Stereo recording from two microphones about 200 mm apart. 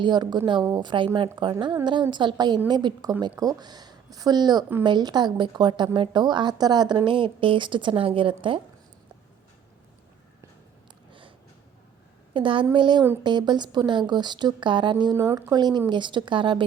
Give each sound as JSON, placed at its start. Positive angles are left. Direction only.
{"t": 0.0, "sound": "speech", "side_deg": -20}
{"t": 12.3, "sound": "speech", "side_deg": -25}